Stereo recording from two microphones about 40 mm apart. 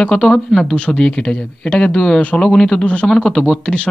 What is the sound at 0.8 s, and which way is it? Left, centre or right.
Speech, left.